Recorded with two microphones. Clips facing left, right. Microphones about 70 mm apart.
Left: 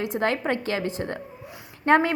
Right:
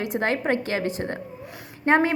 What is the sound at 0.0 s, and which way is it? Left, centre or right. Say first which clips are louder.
A woman's voice: even; right.